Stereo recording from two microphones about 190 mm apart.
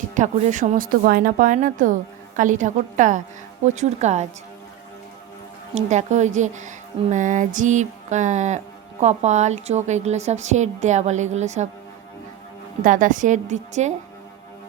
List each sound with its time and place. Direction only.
0.1 s speech: 40° right (ahead or behind)
5.7 s speech: 40° right (ahead or behind)
12.8 s speech: 45° right (ahead or behind)